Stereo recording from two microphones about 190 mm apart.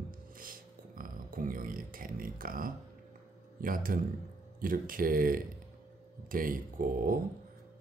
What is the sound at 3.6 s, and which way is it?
Speech, 45° right (ahead or behind).